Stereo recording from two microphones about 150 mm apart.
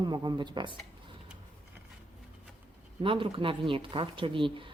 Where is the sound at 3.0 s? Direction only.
35° right (ahead or behind).